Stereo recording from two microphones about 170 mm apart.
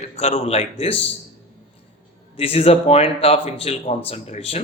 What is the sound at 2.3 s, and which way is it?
Speech, 35° left (ahead or behind).